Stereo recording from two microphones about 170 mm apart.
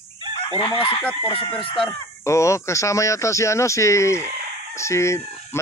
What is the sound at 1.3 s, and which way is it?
Speech, 35° left (ahead or behind).